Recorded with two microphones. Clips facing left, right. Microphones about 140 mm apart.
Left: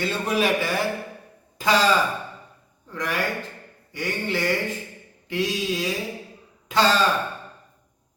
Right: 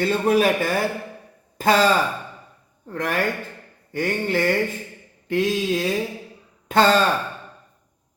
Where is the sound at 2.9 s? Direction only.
55° right (ahead or behind).